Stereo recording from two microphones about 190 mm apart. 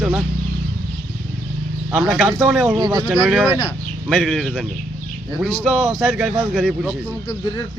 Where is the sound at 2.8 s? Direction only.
25° right (ahead or behind).